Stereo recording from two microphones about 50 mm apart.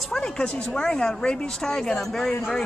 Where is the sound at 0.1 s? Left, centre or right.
Centre.